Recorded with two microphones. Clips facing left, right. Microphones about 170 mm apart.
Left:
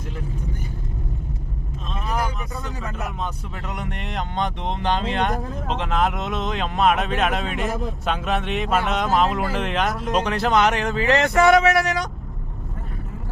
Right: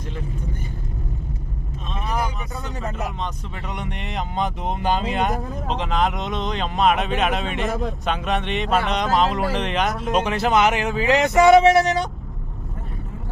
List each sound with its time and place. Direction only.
2.0 s vehicle: centre (ahead or behind)
3.7 s speech: centre (ahead or behind); by 12.0 s 25° right (ahead or behind)